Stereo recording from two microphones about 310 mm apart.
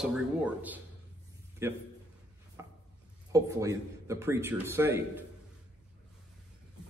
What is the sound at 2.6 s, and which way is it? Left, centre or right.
Wood, centre.